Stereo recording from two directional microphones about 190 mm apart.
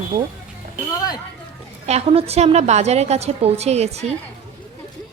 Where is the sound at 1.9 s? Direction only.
30° right (ahead or behind).